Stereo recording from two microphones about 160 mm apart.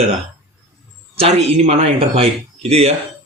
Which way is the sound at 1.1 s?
40° right (ahead or behind).